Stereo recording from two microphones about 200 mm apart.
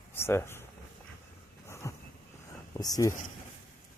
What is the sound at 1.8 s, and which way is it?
Vehicle, 15° left (ahead or behind).